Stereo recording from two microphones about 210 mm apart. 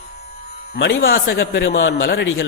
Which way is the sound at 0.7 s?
60° left (ahead or behind).